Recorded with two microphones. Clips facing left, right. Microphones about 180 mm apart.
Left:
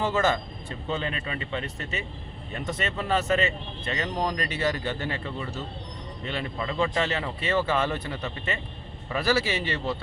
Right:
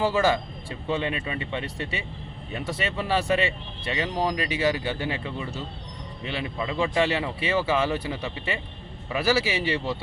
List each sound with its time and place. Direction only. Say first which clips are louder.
0.0 s a man's voice: right 2 dB; 10° right (ahead or behind)
2.5 s a man's voice: right 1 dB; 10° right (ahead or behind)